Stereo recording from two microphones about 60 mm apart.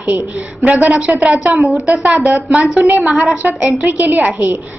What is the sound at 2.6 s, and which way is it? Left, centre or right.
A woman's voice, centre.